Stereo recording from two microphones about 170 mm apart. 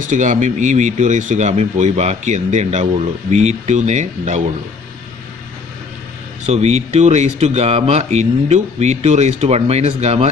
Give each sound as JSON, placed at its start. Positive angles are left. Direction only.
{"t": 0.1, "sound": "speech", "side_deg": -45}
{"t": 6.4, "sound": "speech", "side_deg": -40}